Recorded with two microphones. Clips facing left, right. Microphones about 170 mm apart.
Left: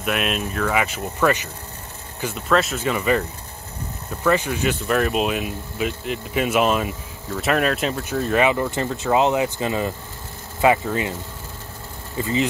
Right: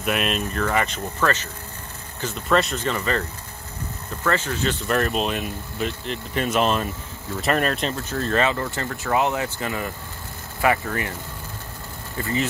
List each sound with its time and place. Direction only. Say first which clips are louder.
0.0 s speech: even; centre (ahead or behind); by 11.1 s 20° left (ahead or behind)
12.2 s speech: left 3 dB; 20° left (ahead or behind)